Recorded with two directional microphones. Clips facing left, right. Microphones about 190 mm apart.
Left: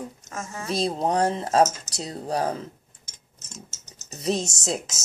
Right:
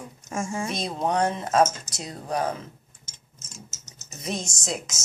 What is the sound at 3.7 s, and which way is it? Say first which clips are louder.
Speech: left 3 dB; 30° left (ahead or behind).